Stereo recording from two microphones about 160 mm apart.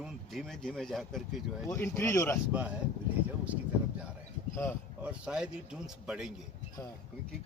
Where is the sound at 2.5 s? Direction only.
10° right (ahead or behind).